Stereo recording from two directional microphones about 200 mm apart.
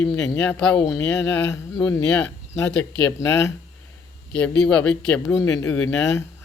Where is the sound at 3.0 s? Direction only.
15° left (ahead or behind).